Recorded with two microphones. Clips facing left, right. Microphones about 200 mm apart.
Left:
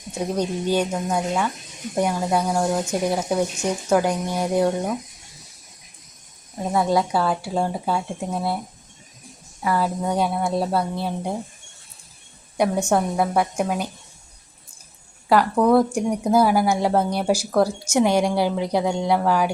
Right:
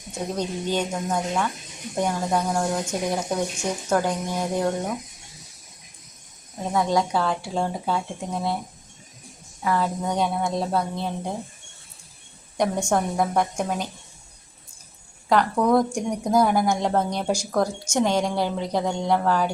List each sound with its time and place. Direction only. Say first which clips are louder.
0.3 s a woman's voice: left 4 dB; 10° left (ahead or behind)
6.7 s a woman's voice: left 2 dB; 5° left (ahead or behind)
9.6 s speech: left 2 dB; 5° left (ahead or behind)
12.5 s a woman's voice: left 3 dB; 10° left (ahead or behind)
15.3 s a woman's voice: left 3 dB; 5° left (ahead or behind)